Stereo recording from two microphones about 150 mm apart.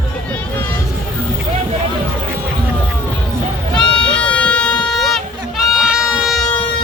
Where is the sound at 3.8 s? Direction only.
5° left (ahead or behind).